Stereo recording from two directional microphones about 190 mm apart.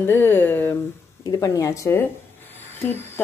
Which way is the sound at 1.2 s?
20° left (ahead or behind).